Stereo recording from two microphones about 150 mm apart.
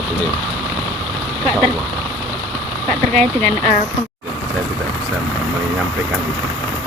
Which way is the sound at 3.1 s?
10° left (ahead or behind).